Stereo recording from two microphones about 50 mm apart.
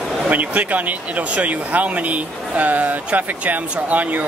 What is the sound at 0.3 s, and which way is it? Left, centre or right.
Speech, right.